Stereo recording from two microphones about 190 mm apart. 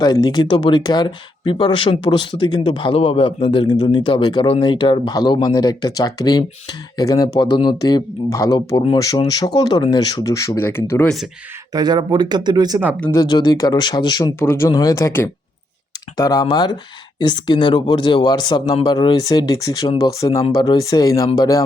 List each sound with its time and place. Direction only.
0.0 s speech: 20° left (ahead or behind); by 11.3 s 5° left (ahead or behind)
11.7 s speech: 20° right (ahead or behind)
13.1 s speech: 20° left (ahead or behind)